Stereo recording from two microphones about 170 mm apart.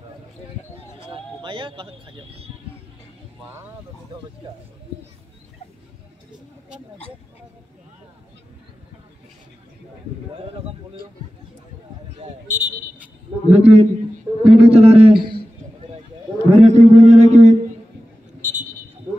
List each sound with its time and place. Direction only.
1.1 s speech: 30° right (ahead or behind)
3.4 s speech: 10° right (ahead or behind)
12.2 s speech: 45° right (ahead or behind)
16.6 s a sound: 40° right (ahead or behind)